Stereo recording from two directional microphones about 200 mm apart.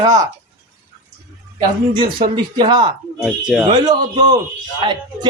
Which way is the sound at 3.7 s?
20° right (ahead or behind).